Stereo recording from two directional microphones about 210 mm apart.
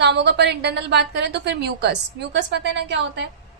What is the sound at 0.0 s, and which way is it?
A woman's voice, 55° right (ahead or behind).